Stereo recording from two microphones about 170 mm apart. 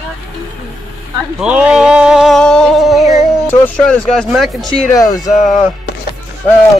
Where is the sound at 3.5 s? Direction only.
5° left (ahead or behind).